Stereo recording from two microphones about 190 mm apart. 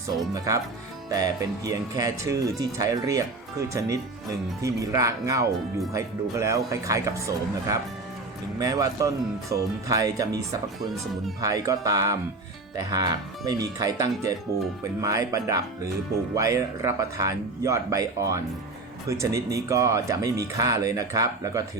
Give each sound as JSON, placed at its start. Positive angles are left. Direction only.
{"t": 1.1, "sound": "speech", "side_deg": -20}
{"t": 10.8, "sound": "speech", "side_deg": 0}
{"t": 11.3, "sound": "speech", "side_deg": -15}